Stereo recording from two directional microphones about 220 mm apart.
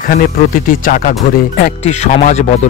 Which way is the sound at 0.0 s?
40° left (ahead or behind).